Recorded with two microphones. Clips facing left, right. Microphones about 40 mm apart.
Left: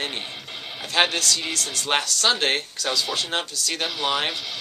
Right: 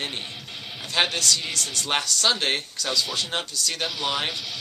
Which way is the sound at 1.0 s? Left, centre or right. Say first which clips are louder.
Left 2 dB; centre.